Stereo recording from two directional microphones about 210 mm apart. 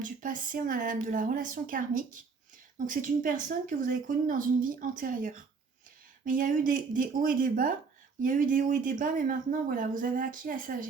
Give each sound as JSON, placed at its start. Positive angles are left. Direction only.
{"t": 0.0, "sound": "speech", "side_deg": -40}